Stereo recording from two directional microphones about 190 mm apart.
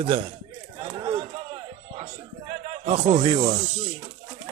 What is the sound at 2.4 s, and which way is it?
Speech, 35° right (ahead or behind).